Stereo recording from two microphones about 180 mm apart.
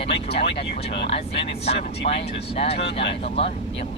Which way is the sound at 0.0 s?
30° left (ahead or behind).